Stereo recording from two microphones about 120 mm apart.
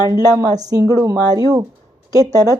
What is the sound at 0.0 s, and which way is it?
A woman's voice, 30° right (ahead or behind).